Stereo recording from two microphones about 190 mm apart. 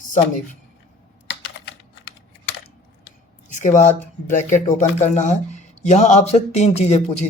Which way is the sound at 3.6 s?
40° left (ahead or behind).